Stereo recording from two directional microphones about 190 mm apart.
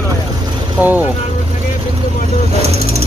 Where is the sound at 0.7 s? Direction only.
10° right (ahead or behind).